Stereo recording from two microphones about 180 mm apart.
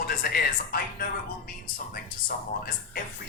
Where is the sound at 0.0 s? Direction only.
55° left (ahead or behind).